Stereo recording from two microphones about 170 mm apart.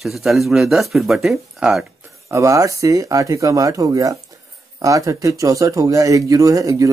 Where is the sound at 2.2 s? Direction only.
15° right (ahead or behind).